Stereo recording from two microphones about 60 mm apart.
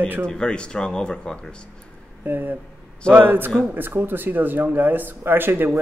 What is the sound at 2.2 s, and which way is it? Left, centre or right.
Speech, right.